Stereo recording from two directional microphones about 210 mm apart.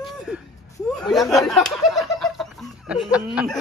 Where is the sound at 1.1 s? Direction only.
Centre (ahead or behind).